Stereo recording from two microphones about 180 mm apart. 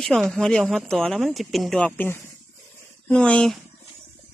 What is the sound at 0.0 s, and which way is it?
Speech, centre (ahead or behind).